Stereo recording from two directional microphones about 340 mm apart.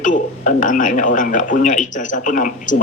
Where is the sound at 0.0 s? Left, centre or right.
Left.